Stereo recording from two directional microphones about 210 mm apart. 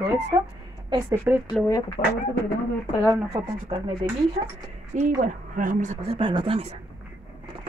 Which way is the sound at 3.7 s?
25° right (ahead or behind).